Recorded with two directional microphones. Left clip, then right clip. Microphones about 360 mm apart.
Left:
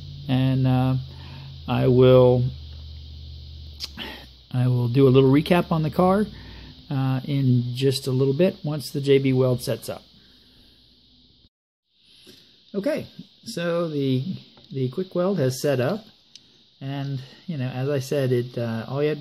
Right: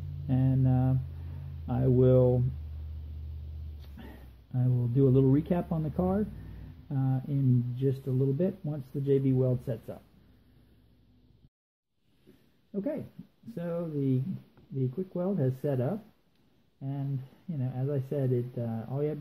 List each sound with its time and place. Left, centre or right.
0.3 s a sound: left
1.7 s speech: left
3.9 s a sound: left
6.9 s speech: left
12.7 s speech: left
17.5 s speech: left